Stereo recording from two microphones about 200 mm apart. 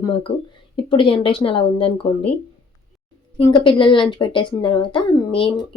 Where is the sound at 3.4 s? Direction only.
25° left (ahead or behind).